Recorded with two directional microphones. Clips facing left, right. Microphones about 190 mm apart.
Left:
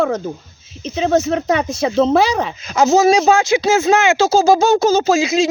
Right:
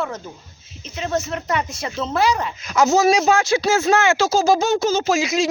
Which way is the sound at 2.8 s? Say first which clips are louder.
Left 4 dB; 25° left (ahead or behind).